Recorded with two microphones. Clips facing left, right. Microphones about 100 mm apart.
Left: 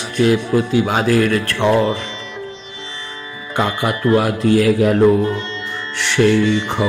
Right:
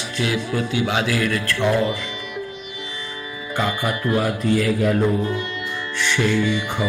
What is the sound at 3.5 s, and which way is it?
Music, 60° left (ahead or behind).